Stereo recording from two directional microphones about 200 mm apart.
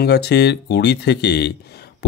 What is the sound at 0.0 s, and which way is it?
Speech, 55° left (ahead or behind).